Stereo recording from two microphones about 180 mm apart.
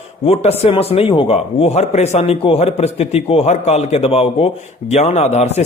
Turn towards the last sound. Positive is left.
turn(degrees=40)  # may be behind; listen again after turning